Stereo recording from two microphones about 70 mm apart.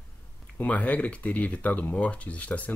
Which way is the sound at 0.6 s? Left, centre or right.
Left.